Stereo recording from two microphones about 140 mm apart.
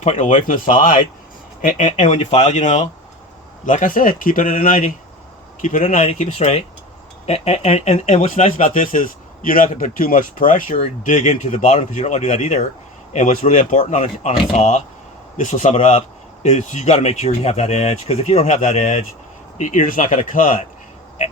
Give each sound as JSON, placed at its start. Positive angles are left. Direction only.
{"t": 0.0, "sound": "speech", "side_deg": 65}
{"t": 1.6, "sound": "speech", "side_deg": 65}
{"t": 3.7, "sound": "speech", "side_deg": 75}
{"t": 5.6, "sound": "speech", "side_deg": 65}
{"t": 6.1, "sound": "speech", "side_deg": 50}
{"t": 15.4, "sound": "speech", "side_deg": 60}
{"t": 19.5, "sound": "speech", "side_deg": 70}